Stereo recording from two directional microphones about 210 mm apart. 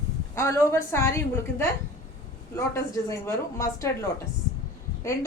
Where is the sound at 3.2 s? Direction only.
15° left (ahead or behind).